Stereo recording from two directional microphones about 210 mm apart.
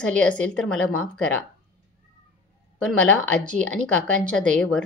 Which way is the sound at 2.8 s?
5° left (ahead or behind).